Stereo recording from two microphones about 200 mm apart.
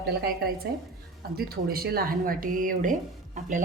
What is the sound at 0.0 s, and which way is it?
Speech, 55° right (ahead or behind).